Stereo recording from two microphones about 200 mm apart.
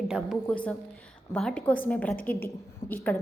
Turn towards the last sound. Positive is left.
turn(degrees=10)  # may be behind; listen again after turning